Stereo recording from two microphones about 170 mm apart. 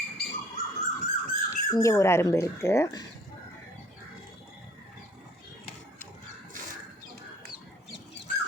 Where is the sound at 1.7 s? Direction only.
15° left (ahead or behind).